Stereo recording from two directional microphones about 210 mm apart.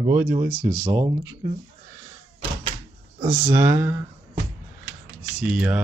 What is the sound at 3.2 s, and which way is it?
Speech, 15° right (ahead or behind).